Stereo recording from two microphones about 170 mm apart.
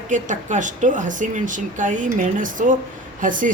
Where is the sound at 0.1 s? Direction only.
45° right (ahead or behind).